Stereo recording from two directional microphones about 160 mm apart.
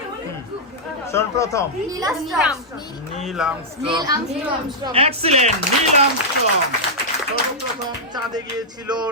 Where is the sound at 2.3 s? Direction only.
5° right (ahead or behind).